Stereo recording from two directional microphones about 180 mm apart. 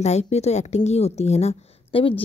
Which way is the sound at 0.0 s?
35° left (ahead or behind).